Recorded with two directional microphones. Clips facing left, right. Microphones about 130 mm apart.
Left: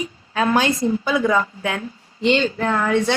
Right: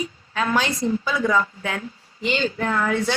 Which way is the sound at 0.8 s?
25° left (ahead or behind).